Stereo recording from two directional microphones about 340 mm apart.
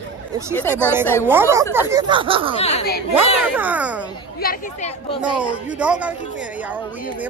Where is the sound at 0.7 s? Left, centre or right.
Centre.